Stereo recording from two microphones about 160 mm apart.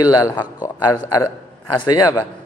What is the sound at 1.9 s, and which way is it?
Speech, 20° left (ahead or behind).